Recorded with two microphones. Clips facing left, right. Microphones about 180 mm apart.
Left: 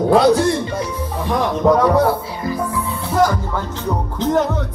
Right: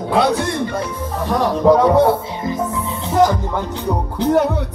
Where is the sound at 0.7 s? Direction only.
55° right (ahead or behind).